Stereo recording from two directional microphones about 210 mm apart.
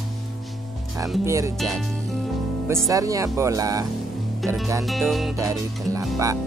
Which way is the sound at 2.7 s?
15° right (ahead or behind).